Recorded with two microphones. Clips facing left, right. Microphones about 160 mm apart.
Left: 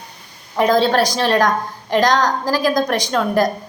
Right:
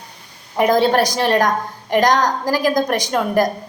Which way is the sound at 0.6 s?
15° right (ahead or behind).